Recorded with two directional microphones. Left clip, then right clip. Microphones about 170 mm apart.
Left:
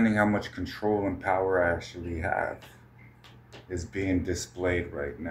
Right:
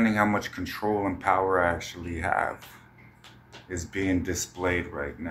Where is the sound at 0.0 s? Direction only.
20° left (ahead or behind).